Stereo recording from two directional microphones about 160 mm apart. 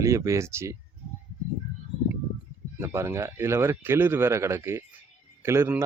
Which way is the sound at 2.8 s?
15° right (ahead or behind).